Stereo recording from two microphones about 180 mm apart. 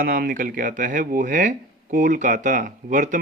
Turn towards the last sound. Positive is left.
turn(degrees=-45)  # may be behind; listen again after turning